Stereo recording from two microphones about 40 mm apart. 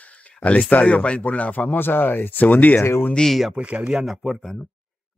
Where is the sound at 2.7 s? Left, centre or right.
Left.